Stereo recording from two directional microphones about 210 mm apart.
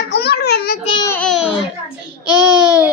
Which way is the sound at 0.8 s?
20° left (ahead or behind).